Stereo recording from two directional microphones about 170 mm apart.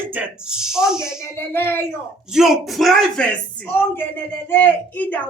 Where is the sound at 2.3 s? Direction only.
Centre (ahead or behind).